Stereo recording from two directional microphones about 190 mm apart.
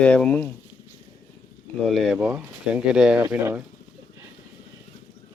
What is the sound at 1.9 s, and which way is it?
Speech, centre (ahead or behind).